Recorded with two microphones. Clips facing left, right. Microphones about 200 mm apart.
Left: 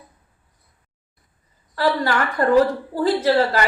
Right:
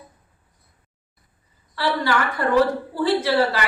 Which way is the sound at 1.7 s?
45° left (ahead or behind).